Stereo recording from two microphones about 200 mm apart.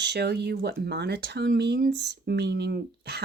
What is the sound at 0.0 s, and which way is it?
Speech, 55° right (ahead or behind).